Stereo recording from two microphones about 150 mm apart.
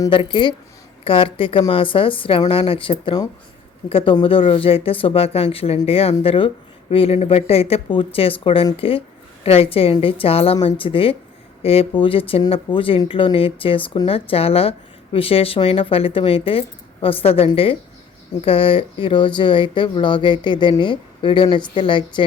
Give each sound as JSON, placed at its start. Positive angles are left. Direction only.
{"t": 0.1, "sound": "speech", "side_deg": 35}